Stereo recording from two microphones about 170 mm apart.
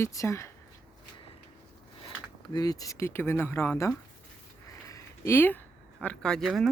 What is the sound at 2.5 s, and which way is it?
Speech, 20° left (ahead or behind).